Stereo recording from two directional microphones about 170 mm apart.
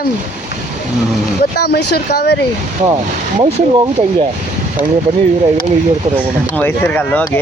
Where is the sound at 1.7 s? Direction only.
75° left (ahead or behind).